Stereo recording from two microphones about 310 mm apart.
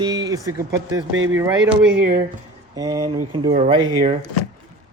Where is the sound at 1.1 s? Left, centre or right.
Right.